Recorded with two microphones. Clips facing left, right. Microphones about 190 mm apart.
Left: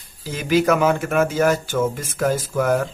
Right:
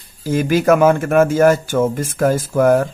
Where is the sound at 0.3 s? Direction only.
50° right (ahead or behind).